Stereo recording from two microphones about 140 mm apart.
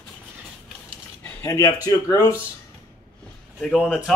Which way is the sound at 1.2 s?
20° left (ahead or behind).